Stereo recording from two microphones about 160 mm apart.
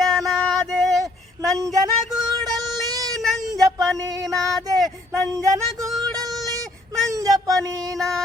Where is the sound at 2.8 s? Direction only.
20° right (ahead or behind).